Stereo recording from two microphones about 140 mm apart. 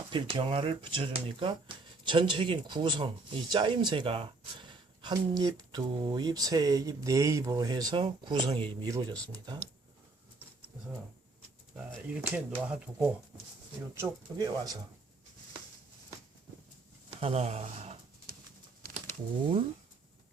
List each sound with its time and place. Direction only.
0.1 s speech: 35° right (ahead or behind)
12.0 s speech: 5° right (ahead or behind)
13.9 s speech: 20° right (ahead or behind)
17.1 s speech: 45° right (ahead or behind)